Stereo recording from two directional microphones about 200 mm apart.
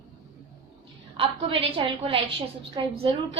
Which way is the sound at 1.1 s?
25° right (ahead or behind).